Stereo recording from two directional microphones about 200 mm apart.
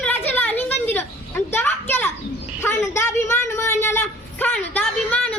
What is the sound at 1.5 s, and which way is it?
Children playing, 10° left (ahead or behind).